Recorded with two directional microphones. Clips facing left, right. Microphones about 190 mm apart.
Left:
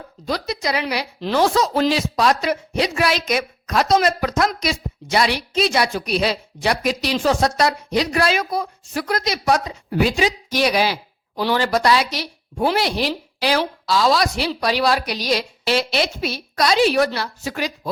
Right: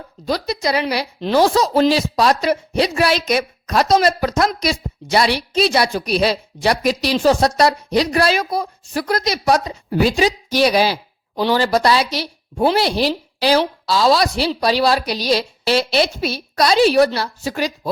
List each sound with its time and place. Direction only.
0.3 s a woman's voice: 35° right (ahead or behind)